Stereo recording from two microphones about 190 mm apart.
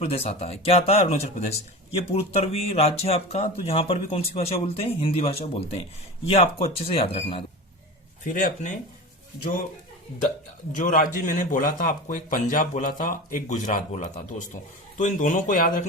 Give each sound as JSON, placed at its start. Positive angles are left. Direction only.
{"t": 0.0, "sound": "speech", "side_deg": 30}
{"t": 8.2, "sound": "a man's voice", "side_deg": 45}
{"t": 10.7, "sound": "a man's voice", "side_deg": 45}